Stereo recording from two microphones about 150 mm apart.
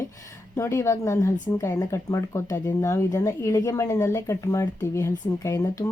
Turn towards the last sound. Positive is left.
turn(degrees=20)  # may be behind; listen again after turning